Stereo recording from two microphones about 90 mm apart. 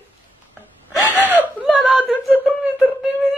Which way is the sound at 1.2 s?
20° right (ahead or behind).